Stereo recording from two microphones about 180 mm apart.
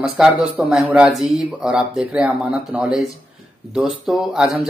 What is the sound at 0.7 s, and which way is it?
Speech, 5° right (ahead or behind).